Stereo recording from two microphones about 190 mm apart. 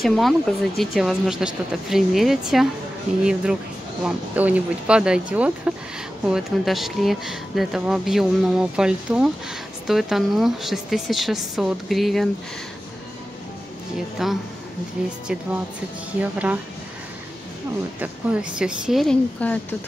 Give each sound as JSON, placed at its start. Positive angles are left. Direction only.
{"t": 0.0, "sound": "speech", "side_deg": 0}
{"t": 4.0, "sound": "speech", "side_deg": -5}
{"t": 14.1, "sound": "speech", "side_deg": 0}
{"t": 16.2, "sound": "speech", "side_deg": -10}
{"t": 18.0, "sound": "speech", "side_deg": -5}